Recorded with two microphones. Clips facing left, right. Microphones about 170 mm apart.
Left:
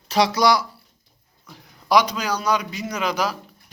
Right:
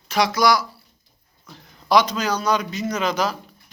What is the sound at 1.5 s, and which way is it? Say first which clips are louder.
Speech: even; 10° left (ahead or behind).